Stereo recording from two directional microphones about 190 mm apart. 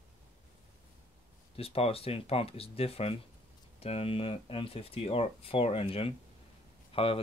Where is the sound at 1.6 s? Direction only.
30° left (ahead or behind).